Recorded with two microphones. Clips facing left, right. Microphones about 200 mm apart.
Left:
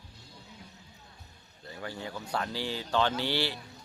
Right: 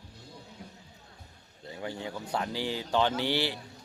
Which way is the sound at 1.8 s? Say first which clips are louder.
Right 2 dB; 20° right (ahead or behind).